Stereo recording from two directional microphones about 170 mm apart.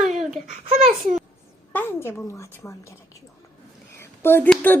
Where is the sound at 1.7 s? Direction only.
15° left (ahead or behind).